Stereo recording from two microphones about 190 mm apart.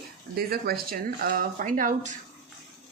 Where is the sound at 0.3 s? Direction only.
55° right (ahead or behind).